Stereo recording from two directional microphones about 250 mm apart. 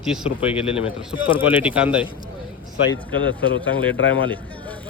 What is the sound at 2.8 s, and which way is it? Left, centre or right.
Speech, left.